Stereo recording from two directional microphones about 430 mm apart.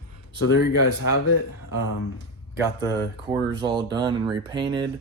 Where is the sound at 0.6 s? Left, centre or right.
Left.